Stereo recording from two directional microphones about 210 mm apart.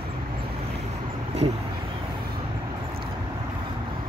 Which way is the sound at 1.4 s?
30° right (ahead or behind).